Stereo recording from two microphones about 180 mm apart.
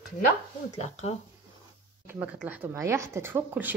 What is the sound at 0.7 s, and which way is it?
Speech, 40° left (ahead or behind).